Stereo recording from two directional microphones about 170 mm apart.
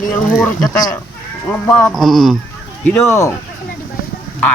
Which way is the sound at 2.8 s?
10° left (ahead or behind).